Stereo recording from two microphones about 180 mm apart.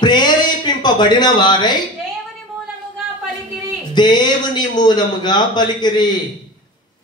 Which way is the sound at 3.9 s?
25° left (ahead or behind).